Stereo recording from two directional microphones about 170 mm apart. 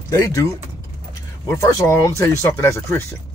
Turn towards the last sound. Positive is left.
turn(degrees=15)  # may be behind; listen again after turning